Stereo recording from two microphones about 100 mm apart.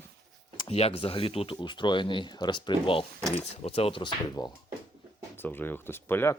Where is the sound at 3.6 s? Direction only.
85° left.